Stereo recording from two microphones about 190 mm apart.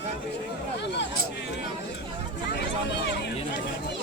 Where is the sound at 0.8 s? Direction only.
65° left (ahead or behind).